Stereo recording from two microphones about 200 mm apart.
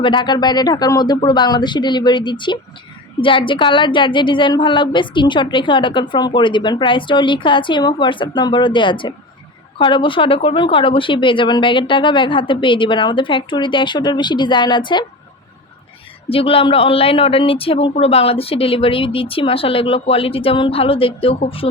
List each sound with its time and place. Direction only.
0.0 s a woman's voice: 25° left (ahead or behind)
16.3 s a woman's voice: 25° left (ahead or behind)